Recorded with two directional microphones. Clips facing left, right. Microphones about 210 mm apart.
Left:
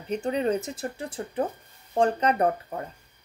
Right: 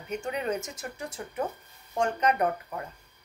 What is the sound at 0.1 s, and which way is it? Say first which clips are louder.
Speech: left 5 dB; 35° left (ahead or behind).